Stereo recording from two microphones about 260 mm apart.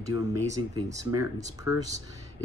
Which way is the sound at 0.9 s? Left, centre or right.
Centre.